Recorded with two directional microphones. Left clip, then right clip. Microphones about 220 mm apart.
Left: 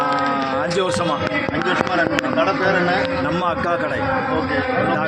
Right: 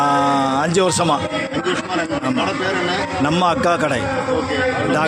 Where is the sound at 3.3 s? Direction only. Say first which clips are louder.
Right 4 dB; 50° right (ahead or behind).